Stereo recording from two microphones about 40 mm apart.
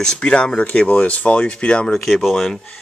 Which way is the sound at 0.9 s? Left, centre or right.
Left.